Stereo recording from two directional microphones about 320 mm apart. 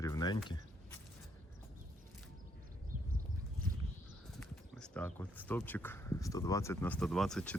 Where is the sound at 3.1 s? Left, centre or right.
Right.